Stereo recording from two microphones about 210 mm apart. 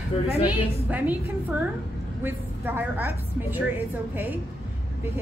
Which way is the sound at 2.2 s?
10° right (ahead or behind).